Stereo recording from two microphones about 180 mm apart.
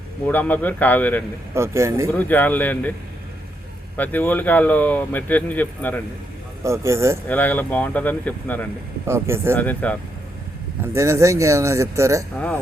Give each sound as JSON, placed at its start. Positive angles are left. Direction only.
{"t": 0.3, "sound": "speech", "side_deg": 10}
{"t": 1.5, "sound": "speech", "side_deg": -15}
{"t": 2.1, "sound": "speech", "side_deg": 10}
{"t": 3.9, "sound": "speech", "side_deg": 10}
{"t": 6.7, "sound": "speech", "side_deg": -15}
{"t": 7.3, "sound": "speech", "side_deg": 10}
{"t": 9.0, "sound": "speech", "side_deg": -15}
{"t": 9.6, "sound": "speech", "side_deg": 10}
{"t": 10.9, "sound": "speech", "side_deg": -15}